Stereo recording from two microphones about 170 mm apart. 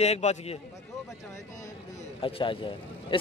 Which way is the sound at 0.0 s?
40° left (ahead or behind).